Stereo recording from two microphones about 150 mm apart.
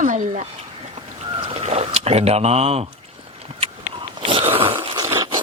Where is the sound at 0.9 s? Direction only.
40° right (ahead or behind).